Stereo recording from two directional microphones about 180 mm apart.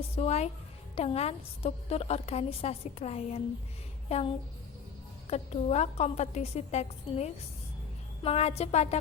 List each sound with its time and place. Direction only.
0.2 s a woman's voice: 35° left (ahead or behind)
5.3 s a woman's voice: 35° left (ahead or behind)